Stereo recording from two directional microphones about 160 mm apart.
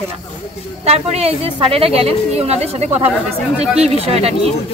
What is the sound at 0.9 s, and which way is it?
A woman's voice, 40° right (ahead or behind).